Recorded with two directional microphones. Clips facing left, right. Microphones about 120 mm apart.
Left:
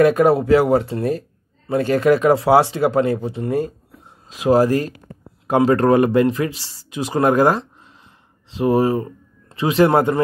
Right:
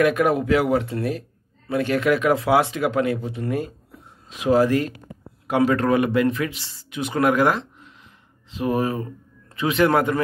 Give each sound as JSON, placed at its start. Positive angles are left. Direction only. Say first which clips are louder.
{"t": 0.0, "sound": "speech", "louder": "left 5 dB", "side_deg": 35}